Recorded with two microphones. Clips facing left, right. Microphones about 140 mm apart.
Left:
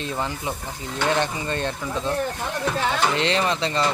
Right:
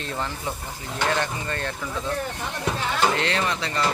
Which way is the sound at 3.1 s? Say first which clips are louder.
Left 3 dB; 20° left (ahead or behind).